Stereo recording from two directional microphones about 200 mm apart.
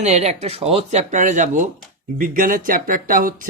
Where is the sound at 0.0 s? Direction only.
35° right (ahead or behind).